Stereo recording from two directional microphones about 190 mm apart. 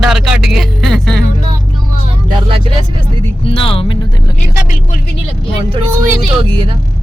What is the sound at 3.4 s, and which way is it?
Speech, 30° left (ahead or behind).